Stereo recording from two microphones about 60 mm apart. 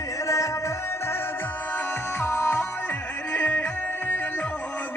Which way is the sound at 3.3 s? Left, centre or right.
Left.